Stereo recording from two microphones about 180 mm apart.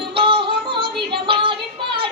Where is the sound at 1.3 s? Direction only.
30° right (ahead or behind).